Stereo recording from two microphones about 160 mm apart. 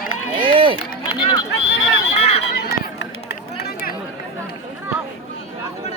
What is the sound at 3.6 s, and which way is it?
Chatter, 75° left (ahead or behind).